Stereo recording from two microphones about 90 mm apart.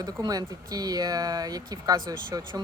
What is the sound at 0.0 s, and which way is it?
Speech, 45° right (ahead or behind).